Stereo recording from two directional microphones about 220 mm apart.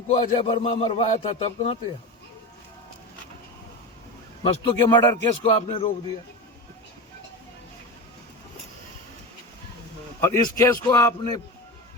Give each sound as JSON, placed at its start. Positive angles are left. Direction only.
{"t": 0.3, "sound": "a man's voice", "side_deg": 25}
{"t": 4.4, "sound": "a man's voice", "side_deg": 20}
{"t": 10.2, "sound": "a man's voice", "side_deg": 15}